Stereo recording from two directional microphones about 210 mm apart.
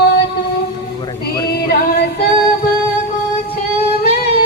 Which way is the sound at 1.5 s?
50° left (ahead or behind).